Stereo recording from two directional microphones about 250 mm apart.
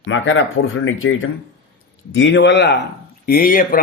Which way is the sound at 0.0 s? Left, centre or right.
Left.